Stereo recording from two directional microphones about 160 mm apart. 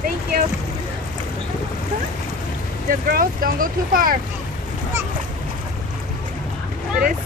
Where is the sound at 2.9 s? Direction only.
65° right (ahead or behind).